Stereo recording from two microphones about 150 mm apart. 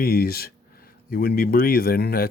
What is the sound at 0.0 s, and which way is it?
A man's voice, 90° left.